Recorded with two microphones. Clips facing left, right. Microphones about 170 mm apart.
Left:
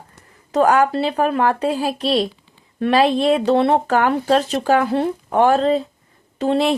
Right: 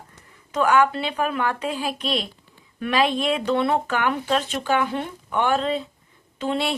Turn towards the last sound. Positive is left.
turn(degrees=40)  # may be behind; listen again after turning